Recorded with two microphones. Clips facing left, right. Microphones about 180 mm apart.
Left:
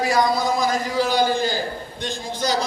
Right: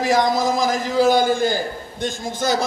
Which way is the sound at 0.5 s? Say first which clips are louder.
Right 1 dB; 90° right.